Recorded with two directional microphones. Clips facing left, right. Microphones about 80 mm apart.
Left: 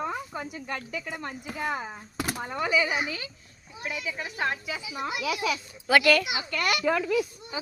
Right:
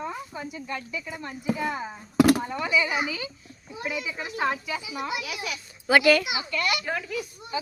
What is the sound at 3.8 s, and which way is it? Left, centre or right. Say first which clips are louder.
Speech: right 2 dB; centre.